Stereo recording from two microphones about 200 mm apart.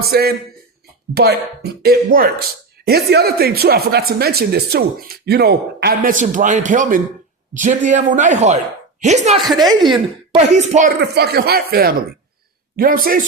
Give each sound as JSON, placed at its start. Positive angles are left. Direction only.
{"t": 0.0, "sound": "a man's voice", "side_deg": -50}
{"t": 9.4, "sound": "a woman's voice", "side_deg": 0}
{"t": 10.3, "sound": "a man's voice", "side_deg": -35}
{"t": 11.1, "sound": "speech", "side_deg": -55}